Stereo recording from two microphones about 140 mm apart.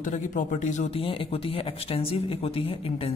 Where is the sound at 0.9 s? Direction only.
40° left (ahead or behind).